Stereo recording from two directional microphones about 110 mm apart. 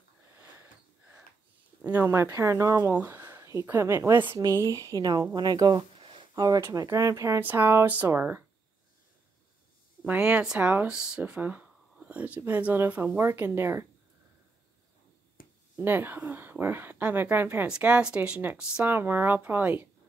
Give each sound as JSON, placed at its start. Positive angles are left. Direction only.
{"t": 1.8, "sound": "speech", "side_deg": -15}
{"t": 5.9, "sound": "a sound", "side_deg": -60}
{"t": 6.3, "sound": "speech", "side_deg": -35}
{"t": 10.0, "sound": "speech", "side_deg": -10}
{"t": 15.8, "sound": "speech", "side_deg": -20}